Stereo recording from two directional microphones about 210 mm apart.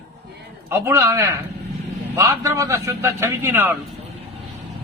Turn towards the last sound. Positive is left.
turn(degrees=-10)  # may be behind; listen again after turning